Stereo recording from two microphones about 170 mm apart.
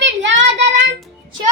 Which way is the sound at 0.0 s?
90° right.